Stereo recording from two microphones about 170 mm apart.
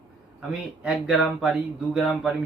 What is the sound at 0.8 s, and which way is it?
Speech, 5° right (ahead or behind).